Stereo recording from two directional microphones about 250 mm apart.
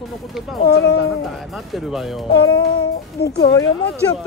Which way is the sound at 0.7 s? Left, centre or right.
Left.